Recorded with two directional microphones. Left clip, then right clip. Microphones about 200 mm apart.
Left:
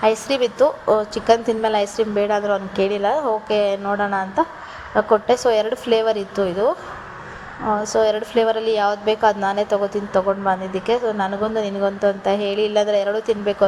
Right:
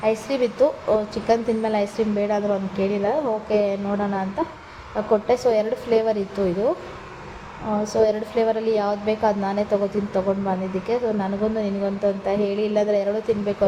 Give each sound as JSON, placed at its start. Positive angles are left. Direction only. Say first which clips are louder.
{"t": 0.0, "sound": "a woman's voice", "louder": "left 4 dB", "side_deg": 25}
{"t": 8.0, "sound": "a woman's voice", "louder": "left 1 dB", "side_deg": 20}